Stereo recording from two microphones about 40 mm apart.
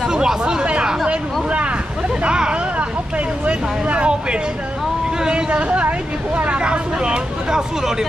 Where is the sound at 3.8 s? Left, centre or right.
Right.